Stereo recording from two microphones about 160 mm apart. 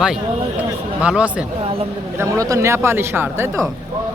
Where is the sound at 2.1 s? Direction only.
15° right (ahead or behind).